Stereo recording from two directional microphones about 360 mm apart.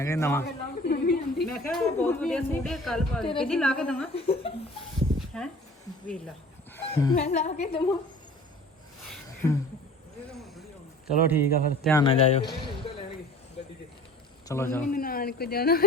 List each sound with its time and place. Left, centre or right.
0.0 s speech: centre
0.4 s a sound: left
1.5 s speech: centre
4.1 s speech: centre
5.4 s speech: centre
6.9 s speech: centre
9.4 s speech: centre
11.0 s speech: centre
11.9 s speech: centre
14.4 s a man's voice: centre
14.9 s speech: left